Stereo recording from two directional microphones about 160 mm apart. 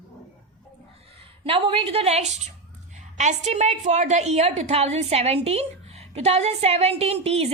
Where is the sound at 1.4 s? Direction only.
35° right (ahead or behind).